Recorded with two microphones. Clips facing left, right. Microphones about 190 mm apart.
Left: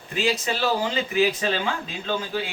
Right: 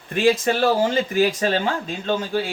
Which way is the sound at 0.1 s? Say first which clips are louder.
Right 7 dB; 55° right (ahead or behind).